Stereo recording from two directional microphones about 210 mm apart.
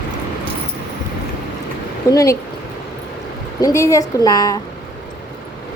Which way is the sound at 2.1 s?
15° left (ahead or behind).